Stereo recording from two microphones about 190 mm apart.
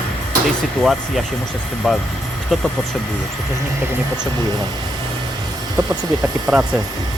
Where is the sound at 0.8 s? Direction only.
Centre (ahead or behind).